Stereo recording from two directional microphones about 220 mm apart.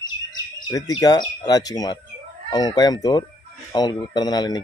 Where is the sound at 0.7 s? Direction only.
15° left (ahead or behind).